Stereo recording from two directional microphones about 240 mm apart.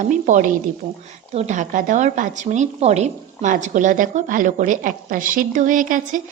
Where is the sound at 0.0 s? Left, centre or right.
Right.